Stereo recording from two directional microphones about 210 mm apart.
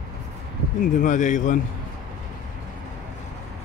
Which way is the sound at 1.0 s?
35° left (ahead or behind).